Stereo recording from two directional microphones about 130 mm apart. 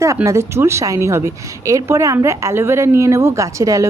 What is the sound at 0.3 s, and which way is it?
A woman's voice, 20° right (ahead or behind).